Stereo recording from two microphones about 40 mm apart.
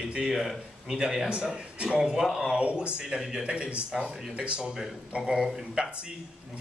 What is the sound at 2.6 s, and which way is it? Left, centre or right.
Speech, right.